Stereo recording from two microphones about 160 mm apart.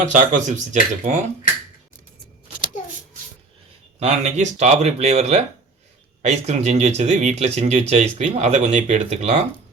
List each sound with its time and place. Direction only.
0.0 s speech: 50° right (ahead or behind)
4.0 s speech: 45° right (ahead or behind)